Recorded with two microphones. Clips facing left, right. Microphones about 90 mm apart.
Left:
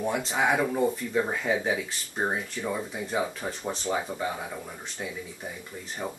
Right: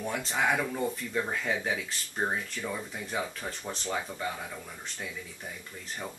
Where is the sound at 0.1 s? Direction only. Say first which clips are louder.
Left 2 dB; 10° left (ahead or behind).